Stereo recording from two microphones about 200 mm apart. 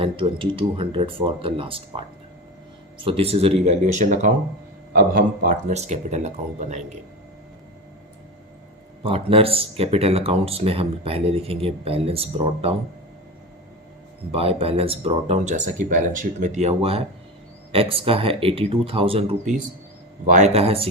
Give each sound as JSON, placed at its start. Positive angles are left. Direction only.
{"t": 0.0, "sound": "speech", "side_deg": -25}
{"t": 9.0, "sound": "speech", "side_deg": -30}
{"t": 14.3, "sound": "speech", "side_deg": -30}